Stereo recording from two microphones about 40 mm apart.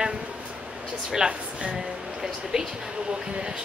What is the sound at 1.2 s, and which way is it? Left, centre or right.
Speech, right.